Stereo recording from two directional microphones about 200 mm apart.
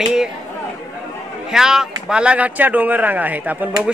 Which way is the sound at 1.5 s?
Centre (ahead or behind).